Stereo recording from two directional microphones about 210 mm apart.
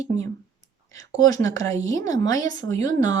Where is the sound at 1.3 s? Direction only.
15° left (ahead or behind).